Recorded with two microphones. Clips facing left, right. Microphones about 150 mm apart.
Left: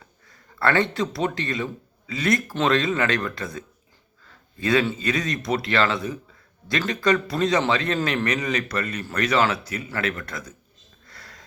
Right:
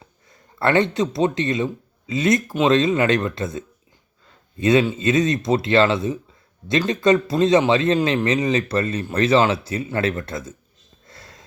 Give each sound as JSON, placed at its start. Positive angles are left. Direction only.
{"t": 0.0, "sound": "speech", "side_deg": -20}
{"t": 11.0, "sound": "wheeze", "side_deg": -25}